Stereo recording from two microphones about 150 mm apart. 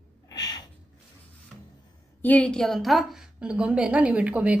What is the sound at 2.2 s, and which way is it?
A woman's voice, 10° left (ahead or behind).